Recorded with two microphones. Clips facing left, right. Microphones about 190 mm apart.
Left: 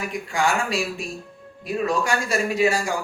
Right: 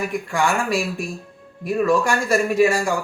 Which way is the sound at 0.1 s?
55° right (ahead or behind).